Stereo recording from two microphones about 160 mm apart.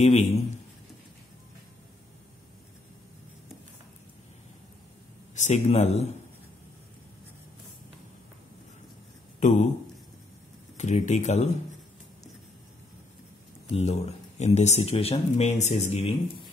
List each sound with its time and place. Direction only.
0.0 s a man's voice: 40° left (ahead or behind)
5.3 s speech: 45° left (ahead or behind)
9.4 s speech: 50° left (ahead or behind)
10.8 s speech: 50° left (ahead or behind)
13.7 s speech: 40° left (ahead or behind)